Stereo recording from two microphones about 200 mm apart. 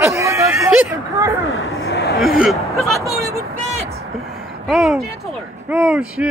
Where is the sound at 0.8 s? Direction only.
15° right (ahead or behind).